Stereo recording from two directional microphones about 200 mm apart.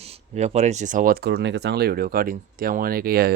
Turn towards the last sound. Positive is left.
turn(degrees=-50)  # may be behind; listen again after turning